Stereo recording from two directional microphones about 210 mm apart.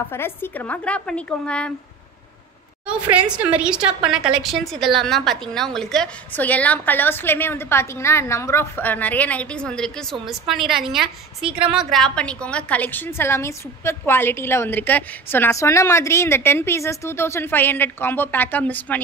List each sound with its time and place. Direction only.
0.1 s a woman's voice: 10° left (ahead or behind)
2.9 s a woman's voice: 5° right (ahead or behind)
11.4 s a woman's voice: 25° right (ahead or behind)
11.7 s a woman's voice: centre (ahead or behind)